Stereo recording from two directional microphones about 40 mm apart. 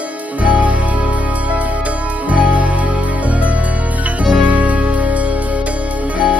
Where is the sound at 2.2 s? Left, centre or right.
Right.